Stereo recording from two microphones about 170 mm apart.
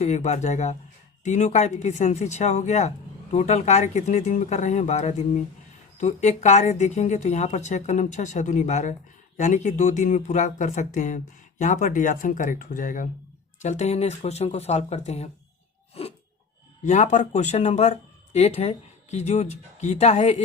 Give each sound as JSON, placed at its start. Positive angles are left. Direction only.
{"t": 0.0, "sound": "a woman's voice", "side_deg": 40}
{"t": 16.0, "sound": "a sound", "side_deg": 35}
{"t": 16.8, "sound": "a woman's voice", "side_deg": 45}